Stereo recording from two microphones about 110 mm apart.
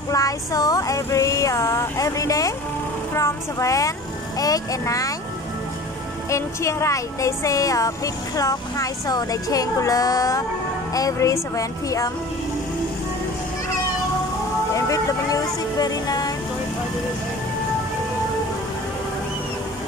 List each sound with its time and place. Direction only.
0.1 s a sound: 30° left (ahead or behind)
3.2 s speech: 30° left (ahead or behind)
6.3 s speech: 25° left (ahead or behind)
14.9 s speech: 35° left (ahead or behind)